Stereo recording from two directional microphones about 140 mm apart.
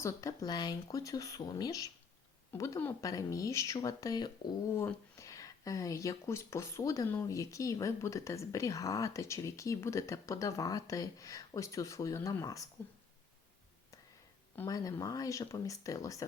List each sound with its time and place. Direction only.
0.0 s speech: 25° left (ahead or behind)
14.7 s speech: 25° left (ahead or behind)